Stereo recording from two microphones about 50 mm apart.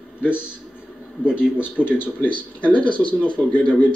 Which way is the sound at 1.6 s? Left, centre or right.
Left.